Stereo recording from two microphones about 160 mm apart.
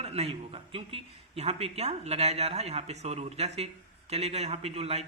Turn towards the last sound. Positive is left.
turn(degrees=-40)  # may be behind; listen again after turning